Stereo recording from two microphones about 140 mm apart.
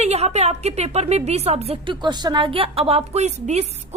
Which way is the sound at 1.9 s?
30° right (ahead or behind).